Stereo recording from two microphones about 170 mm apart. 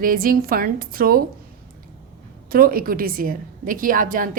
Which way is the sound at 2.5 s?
60° right (ahead or behind).